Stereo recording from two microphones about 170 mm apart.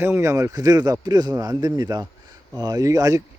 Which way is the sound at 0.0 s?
15° right (ahead or behind).